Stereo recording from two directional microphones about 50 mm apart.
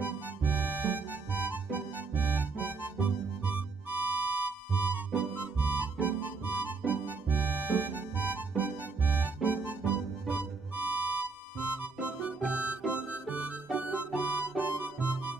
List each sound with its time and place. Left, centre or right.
0.0 s music: right